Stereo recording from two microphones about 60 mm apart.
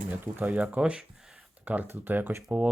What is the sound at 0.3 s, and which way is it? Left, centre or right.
Speech, right.